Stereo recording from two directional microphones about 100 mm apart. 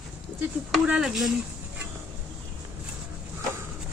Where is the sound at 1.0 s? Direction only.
Centre (ahead or behind).